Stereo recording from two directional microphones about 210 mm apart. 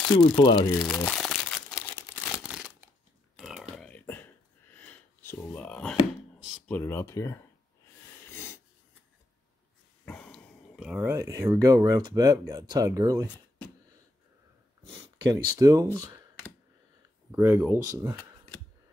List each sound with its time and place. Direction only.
0.1 s speech: 20° left (ahead or behind)
0.8 s crumpling: 5° left (ahead or behind)
2.4 s a sound: 5° right (ahead or behind); by 7.4 s 15° left (ahead or behind)
8.3 s wheeze: 10° left (ahead or behind)
10.0 s speech: 5° left (ahead or behind); by 13.3 s 15° right (ahead or behind)
15.0 s speech: 20° right (ahead or behind)
17.3 s speech: 10° right (ahead or behind)